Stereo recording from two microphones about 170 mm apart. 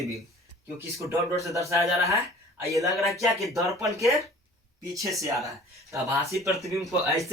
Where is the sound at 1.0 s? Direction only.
20° right (ahead or behind).